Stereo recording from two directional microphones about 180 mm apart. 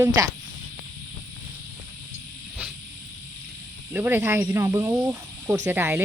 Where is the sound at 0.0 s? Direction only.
20° right (ahead or behind).